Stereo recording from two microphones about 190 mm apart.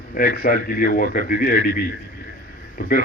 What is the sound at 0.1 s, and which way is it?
A man's voice, 50° left (ahead or behind).